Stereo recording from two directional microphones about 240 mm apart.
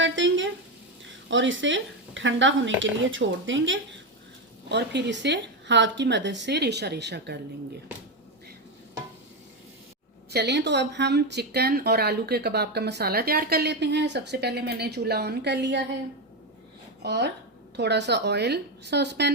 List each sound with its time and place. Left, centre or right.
0.0 s frying: right
1.3 s speech: right
10.3 s speech: right
17.0 s speech: right